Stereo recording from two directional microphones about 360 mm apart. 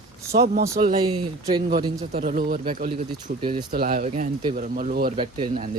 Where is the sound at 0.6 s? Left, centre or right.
Centre.